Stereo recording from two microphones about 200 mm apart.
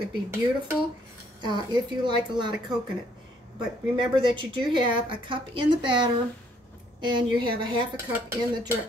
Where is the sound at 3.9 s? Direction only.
25° right (ahead or behind).